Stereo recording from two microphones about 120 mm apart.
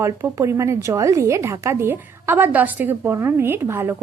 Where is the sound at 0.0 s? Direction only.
25° right (ahead or behind).